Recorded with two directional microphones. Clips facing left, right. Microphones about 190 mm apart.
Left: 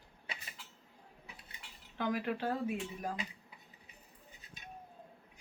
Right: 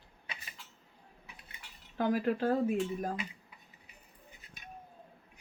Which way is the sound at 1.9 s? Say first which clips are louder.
Right 5 dB; 40° right (ahead or behind).